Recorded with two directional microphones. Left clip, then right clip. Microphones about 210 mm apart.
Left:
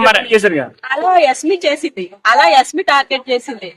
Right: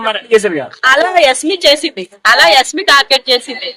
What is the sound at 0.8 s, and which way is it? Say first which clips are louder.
A woman's voice: right 4 dB; centre (ahead or behind).